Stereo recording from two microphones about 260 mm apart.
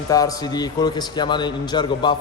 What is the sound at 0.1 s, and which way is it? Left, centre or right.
A man's voice, centre.